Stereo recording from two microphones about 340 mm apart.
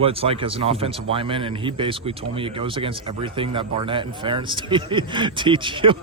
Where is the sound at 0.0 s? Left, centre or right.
Centre.